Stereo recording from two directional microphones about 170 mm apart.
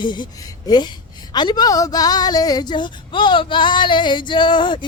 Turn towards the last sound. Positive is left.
turn(degrees=30)  # may be behind; listen again after turning